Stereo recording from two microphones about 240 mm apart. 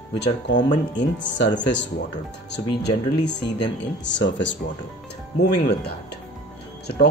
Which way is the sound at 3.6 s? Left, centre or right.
Left.